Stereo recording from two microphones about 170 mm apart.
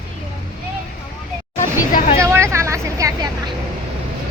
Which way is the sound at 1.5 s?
45° left (ahead or behind).